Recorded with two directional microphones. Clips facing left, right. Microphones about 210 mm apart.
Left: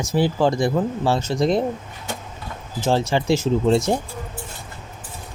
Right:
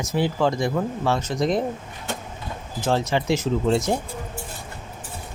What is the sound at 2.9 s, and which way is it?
Speech, 30° left (ahead or behind).